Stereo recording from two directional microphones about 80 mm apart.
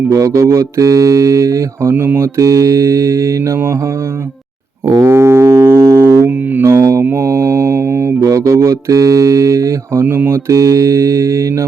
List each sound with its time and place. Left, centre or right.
0.1 s mantra: right
5.0 s a sound: right
5.8 s music: right
6.2 s music: right
6.7 s mantra: right